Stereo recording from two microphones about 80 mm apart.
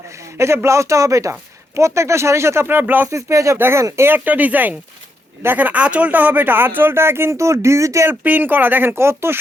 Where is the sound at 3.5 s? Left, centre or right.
Right.